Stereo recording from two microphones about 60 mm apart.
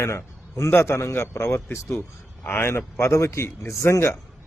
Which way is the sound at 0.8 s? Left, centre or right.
Left.